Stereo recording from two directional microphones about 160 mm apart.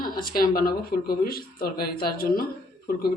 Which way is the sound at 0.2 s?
65° left (ahead or behind).